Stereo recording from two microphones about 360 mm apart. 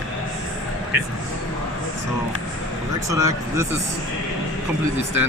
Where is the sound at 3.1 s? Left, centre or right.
Centre.